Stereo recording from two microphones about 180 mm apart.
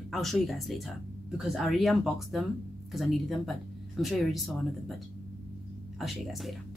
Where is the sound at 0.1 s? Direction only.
Centre (ahead or behind).